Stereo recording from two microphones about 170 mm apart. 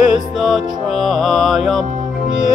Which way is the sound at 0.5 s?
Centre (ahead or behind).